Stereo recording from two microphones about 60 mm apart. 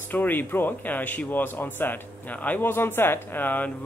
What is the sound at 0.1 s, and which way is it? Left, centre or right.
Speech, left.